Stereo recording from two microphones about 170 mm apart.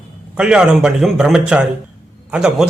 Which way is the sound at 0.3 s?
5° right (ahead or behind).